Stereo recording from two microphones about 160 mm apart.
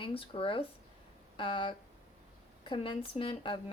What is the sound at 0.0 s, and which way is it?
A woman's voice, 35° left (ahead or behind).